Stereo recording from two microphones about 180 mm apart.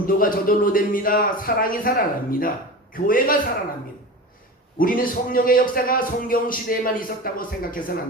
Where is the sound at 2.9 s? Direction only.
50° left (ahead or behind).